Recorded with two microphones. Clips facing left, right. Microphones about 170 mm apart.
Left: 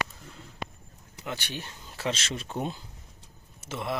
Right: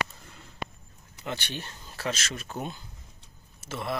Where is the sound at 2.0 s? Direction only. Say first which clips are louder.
Left 1 dB; 30° left (ahead or behind).